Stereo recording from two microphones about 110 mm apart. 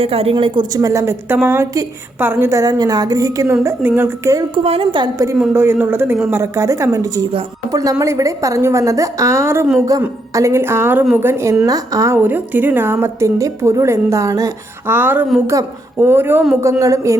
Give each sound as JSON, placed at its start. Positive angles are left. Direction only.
{"t": 0.0, "sound": "a woman's voice", "side_deg": -65}
{"t": 0.8, "sound": "a woman's voice", "side_deg": -30}
{"t": 4.5, "sound": "a woman's voice", "side_deg": -60}
{"t": 5.5, "sound": "a woman's voice", "side_deg": -20}
{"t": 11.6, "sound": "a woman's voice", "side_deg": -30}
{"t": 14.9, "sound": "a woman's voice", "side_deg": -15}
{"t": 16.8, "sound": "a woman's voice", "side_deg": -30}